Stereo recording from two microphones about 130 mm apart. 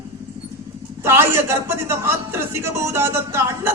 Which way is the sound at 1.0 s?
20° right (ahead or behind).